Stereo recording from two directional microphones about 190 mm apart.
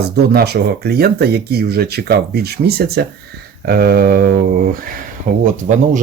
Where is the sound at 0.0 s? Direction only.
55° right (ahead or behind).